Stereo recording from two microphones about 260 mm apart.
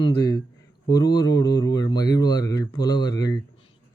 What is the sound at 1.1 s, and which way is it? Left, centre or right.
Speech, centre.